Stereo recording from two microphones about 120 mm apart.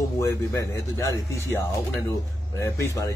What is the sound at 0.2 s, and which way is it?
A man's voice, 25° left (ahead or behind).